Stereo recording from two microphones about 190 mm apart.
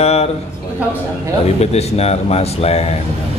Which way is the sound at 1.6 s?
35° left (ahead or behind).